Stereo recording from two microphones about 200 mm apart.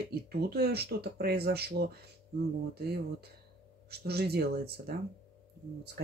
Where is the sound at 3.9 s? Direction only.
55° right (ahead or behind).